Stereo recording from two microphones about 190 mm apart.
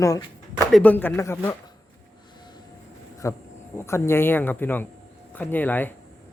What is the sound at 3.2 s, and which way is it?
Speech, 15° left (ahead or behind).